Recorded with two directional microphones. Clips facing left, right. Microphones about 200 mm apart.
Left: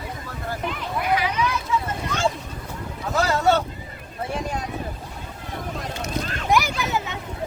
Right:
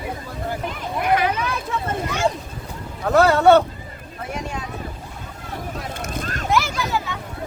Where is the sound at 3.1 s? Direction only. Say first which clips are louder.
Right 7 dB; 60° right (ahead or behind).